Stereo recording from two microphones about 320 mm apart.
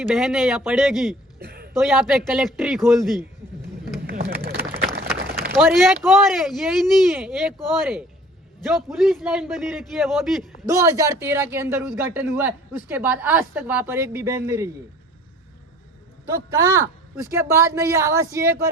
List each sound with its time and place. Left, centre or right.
0.1 s speech: centre
1.4 s a sound: right
1.8 s speech: centre
4.0 s a sound: right
5.5 s a man's voice: centre
16.2 s a man's voice: centre